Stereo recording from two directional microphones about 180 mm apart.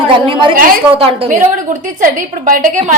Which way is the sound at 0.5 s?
50° right (ahead or behind).